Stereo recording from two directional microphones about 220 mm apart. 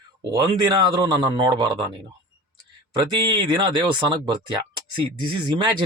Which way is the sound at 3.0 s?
20° right (ahead or behind).